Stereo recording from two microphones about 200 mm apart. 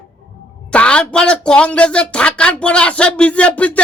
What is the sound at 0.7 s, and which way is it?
Speech, 5° left (ahead or behind).